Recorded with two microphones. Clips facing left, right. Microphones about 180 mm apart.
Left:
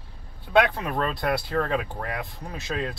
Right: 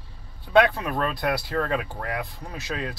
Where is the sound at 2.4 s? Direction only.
25° left (ahead or behind).